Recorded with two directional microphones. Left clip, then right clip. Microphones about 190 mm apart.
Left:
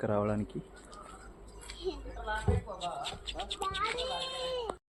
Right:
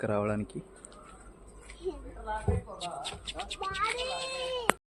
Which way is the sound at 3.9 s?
Centre (ahead or behind).